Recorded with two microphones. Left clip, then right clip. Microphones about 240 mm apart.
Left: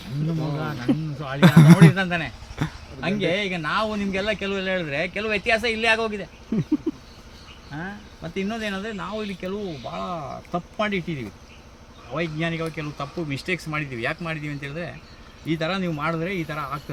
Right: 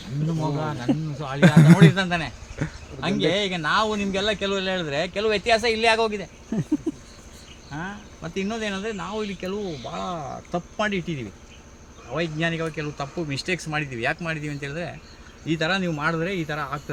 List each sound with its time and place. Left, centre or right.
0.3 s speech: centre
1.4 s a man's voice: centre
1.8 s speech: centre
2.6 s a sound: centre
3.0 s speech: centre
7.8 s speech: centre